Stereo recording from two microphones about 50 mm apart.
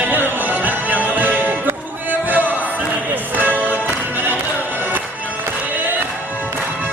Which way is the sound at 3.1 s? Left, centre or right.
Right.